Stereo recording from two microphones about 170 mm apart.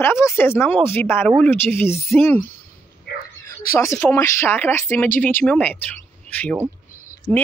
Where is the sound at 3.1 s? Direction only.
75° left (ahead or behind).